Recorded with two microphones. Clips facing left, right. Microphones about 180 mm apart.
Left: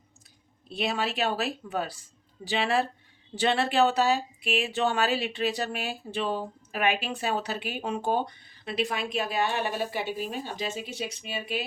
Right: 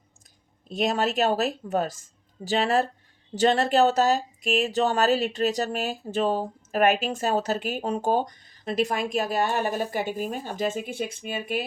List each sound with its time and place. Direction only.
0.7 s speech: 45° right (ahead or behind)